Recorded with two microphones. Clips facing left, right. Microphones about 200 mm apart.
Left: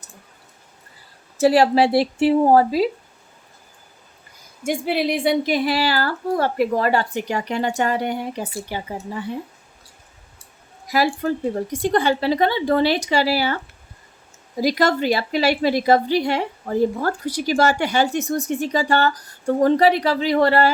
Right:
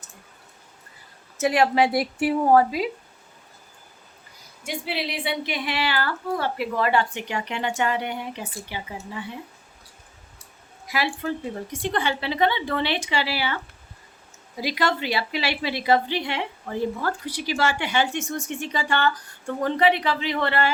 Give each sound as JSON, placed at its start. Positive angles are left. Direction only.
{"t": 1.4, "sound": "a woman's voice", "side_deg": 35}
{"t": 4.6, "sound": "a woman's voice", "side_deg": 50}
{"t": 10.8, "sound": "a woman's voice", "side_deg": 40}
{"t": 14.6, "sound": "a woman's voice", "side_deg": 40}